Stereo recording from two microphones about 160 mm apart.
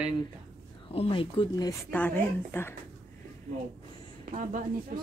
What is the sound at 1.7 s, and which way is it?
A woman's voice, 10° left (ahead or behind).